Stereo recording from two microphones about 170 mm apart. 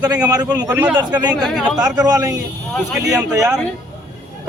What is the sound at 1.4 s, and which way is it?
Speech, centre (ahead or behind).